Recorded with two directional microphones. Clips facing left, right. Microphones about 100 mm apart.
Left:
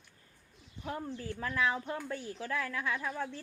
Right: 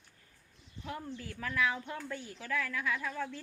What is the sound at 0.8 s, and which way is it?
A woman's voice, 35° left (ahead or behind).